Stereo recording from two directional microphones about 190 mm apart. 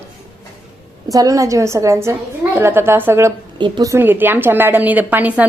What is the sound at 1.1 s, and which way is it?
A woman's voice, 20° right (ahead or behind).